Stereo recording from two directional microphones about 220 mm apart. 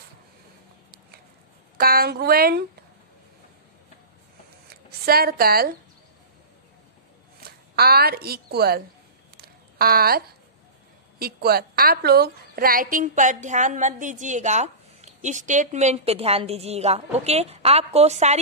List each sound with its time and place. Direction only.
1.8 s speech: 45° right (ahead or behind)
4.6 s speech: 45° right (ahead or behind)
7.3 s a woman's voice: 45° right (ahead or behind)
9.4 s a sound: 45° right (ahead or behind)
11.1 s a woman's voice: 45° right (ahead or behind)